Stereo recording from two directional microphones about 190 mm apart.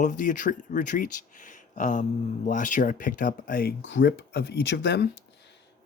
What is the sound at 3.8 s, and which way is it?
Speech, 70° left (ahead or behind).